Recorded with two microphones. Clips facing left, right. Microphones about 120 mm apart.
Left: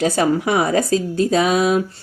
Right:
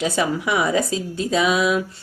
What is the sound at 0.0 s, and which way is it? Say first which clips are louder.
A woman's voice: left 4 dB; 40° left (ahead or behind).